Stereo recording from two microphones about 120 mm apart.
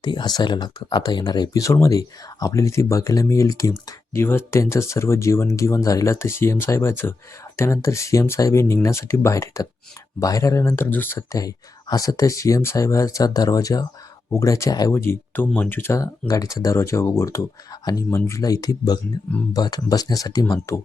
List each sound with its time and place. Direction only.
0.0 s speech: 35° left (ahead or behind)